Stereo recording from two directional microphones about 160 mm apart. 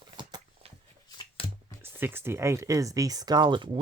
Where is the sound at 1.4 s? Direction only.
35° left (ahead or behind).